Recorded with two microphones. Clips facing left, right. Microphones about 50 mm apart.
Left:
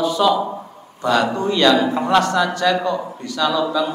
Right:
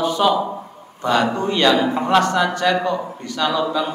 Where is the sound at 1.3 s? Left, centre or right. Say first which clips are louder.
Left 1 dB; right.